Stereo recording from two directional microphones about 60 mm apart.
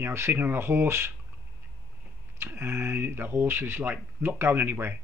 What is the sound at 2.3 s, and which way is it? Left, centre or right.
Speech, right.